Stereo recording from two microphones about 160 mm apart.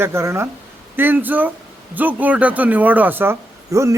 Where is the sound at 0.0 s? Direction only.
15° right (ahead or behind).